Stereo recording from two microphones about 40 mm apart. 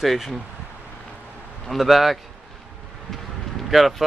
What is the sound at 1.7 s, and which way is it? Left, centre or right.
Speech, centre.